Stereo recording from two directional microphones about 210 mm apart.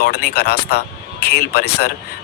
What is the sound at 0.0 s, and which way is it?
Speech, 50° left (ahead or behind).